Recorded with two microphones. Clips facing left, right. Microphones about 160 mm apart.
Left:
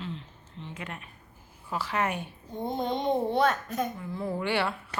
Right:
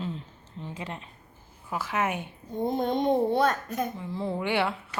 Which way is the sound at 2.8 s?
50° right (ahead or behind).